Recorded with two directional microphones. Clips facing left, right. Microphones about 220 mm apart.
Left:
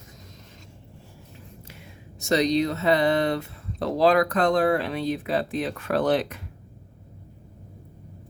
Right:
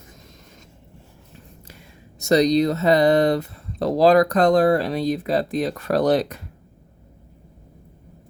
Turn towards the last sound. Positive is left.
turn(degrees=-40)  # may be behind; listen again after turning